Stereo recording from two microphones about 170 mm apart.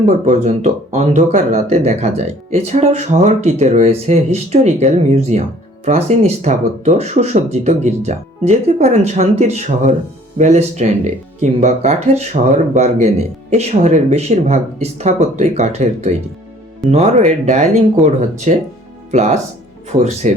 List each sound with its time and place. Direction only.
0.1 s speech: 45° right (ahead or behind)